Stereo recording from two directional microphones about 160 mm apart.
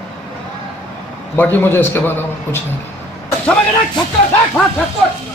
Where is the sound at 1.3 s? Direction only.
10° left (ahead or behind).